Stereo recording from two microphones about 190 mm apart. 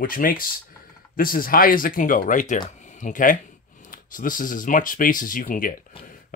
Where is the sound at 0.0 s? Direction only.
50° left (ahead or behind).